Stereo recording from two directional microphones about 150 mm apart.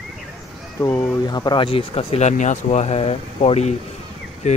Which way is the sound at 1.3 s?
30° left (ahead or behind).